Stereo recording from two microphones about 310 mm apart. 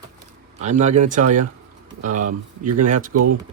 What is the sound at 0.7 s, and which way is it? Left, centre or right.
Speech, right.